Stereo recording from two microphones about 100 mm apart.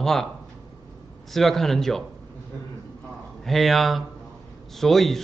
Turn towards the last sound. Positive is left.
turn(degrees=5)  # may be behind; listen again after turning